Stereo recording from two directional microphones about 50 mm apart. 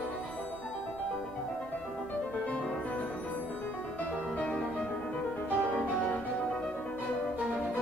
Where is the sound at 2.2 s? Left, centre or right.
Left.